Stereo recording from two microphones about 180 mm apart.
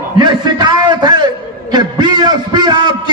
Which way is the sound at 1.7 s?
25° right (ahead or behind).